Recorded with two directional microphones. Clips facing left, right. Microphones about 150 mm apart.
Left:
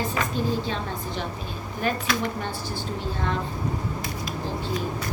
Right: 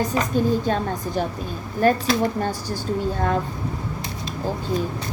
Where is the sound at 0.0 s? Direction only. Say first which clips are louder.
Right 5 dB; 40° right (ahead or behind).